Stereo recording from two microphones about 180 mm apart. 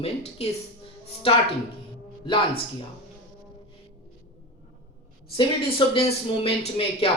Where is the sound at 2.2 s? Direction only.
25° left (ahead or behind).